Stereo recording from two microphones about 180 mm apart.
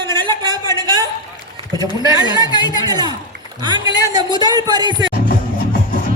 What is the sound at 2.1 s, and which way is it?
A woman's voice, 20° right (ahead or behind).